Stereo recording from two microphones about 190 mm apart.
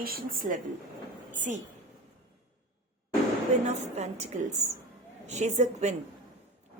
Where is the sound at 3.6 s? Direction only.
35° right (ahead or behind).